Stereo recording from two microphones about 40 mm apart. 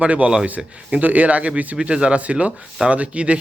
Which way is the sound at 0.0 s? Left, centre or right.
Right.